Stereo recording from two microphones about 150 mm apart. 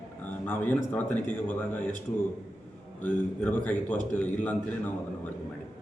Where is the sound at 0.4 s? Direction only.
10° left (ahead or behind).